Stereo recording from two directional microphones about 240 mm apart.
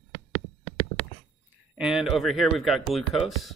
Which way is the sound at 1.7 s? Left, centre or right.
Centre.